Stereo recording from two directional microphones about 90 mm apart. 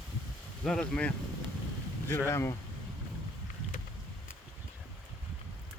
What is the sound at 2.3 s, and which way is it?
Speech, 30° left (ahead or behind).